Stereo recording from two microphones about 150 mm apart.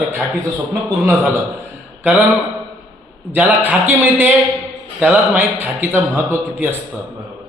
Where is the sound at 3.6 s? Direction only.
15° right (ahead or behind).